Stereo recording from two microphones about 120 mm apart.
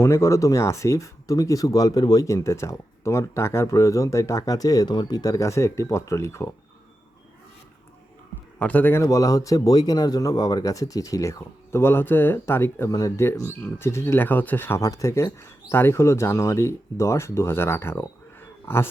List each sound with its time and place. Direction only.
0.0 s speech: 25° left (ahead or behind)
8.5 s speech: 15° left (ahead or behind)